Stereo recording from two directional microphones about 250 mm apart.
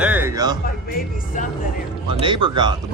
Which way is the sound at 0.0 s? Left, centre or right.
Centre.